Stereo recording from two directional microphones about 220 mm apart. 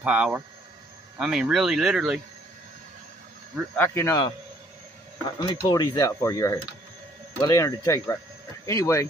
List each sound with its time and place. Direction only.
0.0 s speech: 5° right (ahead or behind)
3.7 s speech: 10° left (ahead or behind)
5.7 s speech: 15° left (ahead or behind)